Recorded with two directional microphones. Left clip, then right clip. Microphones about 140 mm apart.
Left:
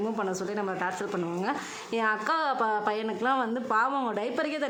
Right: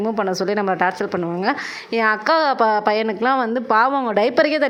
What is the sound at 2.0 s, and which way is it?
Speech, 30° right (ahead or behind).